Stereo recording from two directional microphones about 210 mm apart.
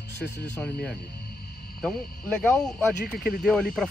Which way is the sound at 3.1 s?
5° left (ahead or behind).